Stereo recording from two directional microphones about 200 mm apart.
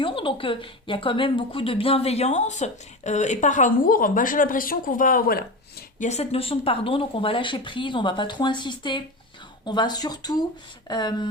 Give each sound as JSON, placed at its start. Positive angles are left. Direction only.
{"t": 0.0, "sound": "a woman's voice", "side_deg": 25}
{"t": 6.0, "sound": "speech", "side_deg": 35}